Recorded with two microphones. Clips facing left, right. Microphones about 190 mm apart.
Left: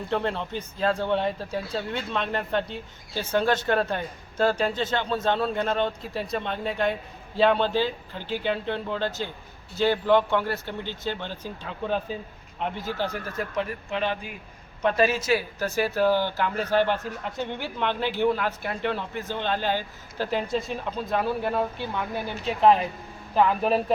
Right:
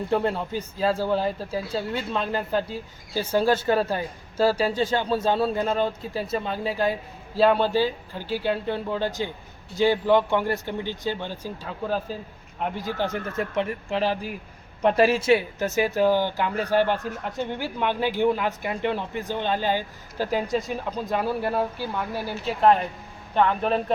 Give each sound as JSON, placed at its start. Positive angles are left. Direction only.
{"t": 0.1, "sound": "speech", "side_deg": -10}
{"t": 13.0, "sound": "a man's voice", "side_deg": -20}